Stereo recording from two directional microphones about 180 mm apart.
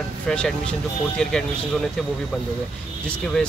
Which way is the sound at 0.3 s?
5° left (ahead or behind).